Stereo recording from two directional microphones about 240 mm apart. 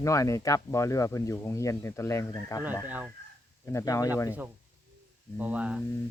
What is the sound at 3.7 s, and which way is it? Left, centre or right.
Speech, centre.